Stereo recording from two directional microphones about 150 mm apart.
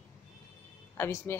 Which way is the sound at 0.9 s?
15° left (ahead or behind).